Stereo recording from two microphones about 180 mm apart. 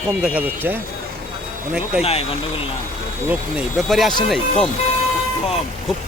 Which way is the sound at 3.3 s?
5° right (ahead or behind).